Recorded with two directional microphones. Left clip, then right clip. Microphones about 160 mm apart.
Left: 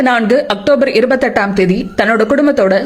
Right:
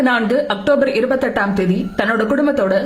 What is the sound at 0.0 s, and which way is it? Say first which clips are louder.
A woman's voice: left 4 dB; 30° left (ahead or behind).